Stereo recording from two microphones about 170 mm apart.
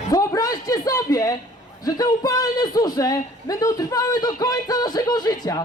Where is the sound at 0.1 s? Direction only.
20° left (ahead or behind).